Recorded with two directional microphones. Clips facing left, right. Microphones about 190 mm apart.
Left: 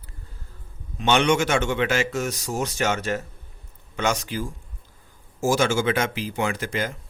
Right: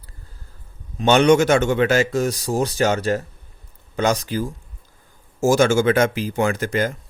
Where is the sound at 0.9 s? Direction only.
40° right (ahead or behind).